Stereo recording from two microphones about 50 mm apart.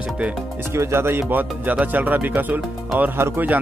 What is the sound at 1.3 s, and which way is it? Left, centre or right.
Speech, right.